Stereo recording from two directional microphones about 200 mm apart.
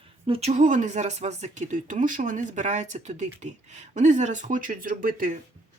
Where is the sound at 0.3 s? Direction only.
30° right (ahead or behind).